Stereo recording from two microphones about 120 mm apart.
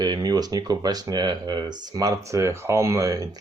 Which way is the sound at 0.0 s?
35° right (ahead or behind).